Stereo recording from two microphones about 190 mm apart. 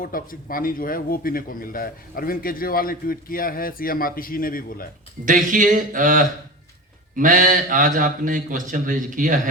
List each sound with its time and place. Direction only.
0.0 s a man's voice: 50° left (ahead or behind)
5.2 s a man's voice: 45° right (ahead or behind)